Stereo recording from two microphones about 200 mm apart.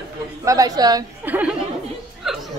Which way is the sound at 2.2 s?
Centre (ahead or behind).